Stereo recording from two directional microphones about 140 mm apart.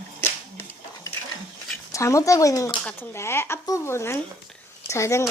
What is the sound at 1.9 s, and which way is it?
Speech, 20° left (ahead or behind).